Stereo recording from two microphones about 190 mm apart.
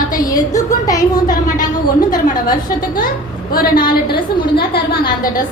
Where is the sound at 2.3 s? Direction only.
20° left (ahead or behind).